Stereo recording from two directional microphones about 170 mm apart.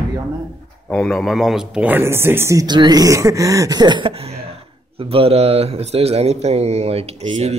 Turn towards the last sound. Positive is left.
turn(degrees=-35)  # may be behind; listen again after turning